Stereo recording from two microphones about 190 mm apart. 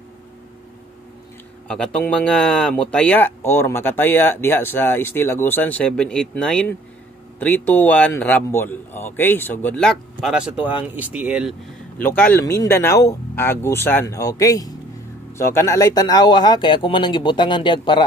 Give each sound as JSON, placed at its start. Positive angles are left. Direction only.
{"t": 1.7, "sound": "speech", "side_deg": 5}
{"t": 12.0, "sound": "speech", "side_deg": 10}